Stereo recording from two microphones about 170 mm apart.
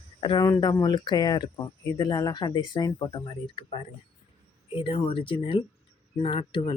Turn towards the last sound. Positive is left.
turn(degrees=30)  # may be behind; listen again after turning